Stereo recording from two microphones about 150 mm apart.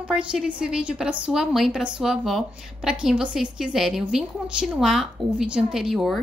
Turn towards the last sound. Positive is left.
turn(degrees=0)  # may be behind; listen again after turning